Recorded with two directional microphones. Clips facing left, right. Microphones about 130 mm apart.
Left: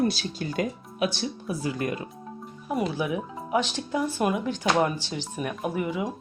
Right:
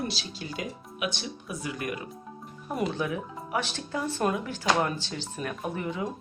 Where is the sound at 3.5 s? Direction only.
20° left (ahead or behind).